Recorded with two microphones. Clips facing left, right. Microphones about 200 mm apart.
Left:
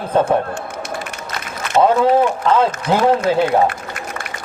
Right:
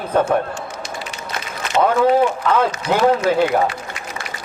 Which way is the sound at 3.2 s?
55° left (ahead or behind).